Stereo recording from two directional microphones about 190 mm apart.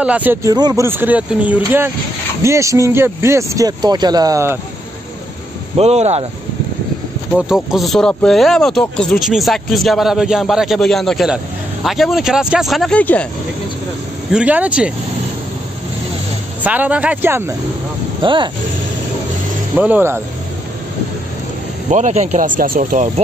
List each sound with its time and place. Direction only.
0.0 s speech: 10° right (ahead or behind)
5.8 s speech: 35° right (ahead or behind)
7.3 s speech: 5° right (ahead or behind)
14.3 s speech: 5° right (ahead or behind)
16.6 s speech: 10° right (ahead or behind)
18.2 s speech: 25° right (ahead or behind)
19.7 s speech: 10° right (ahead or behind)
21.8 s speech: 40° right (ahead or behind)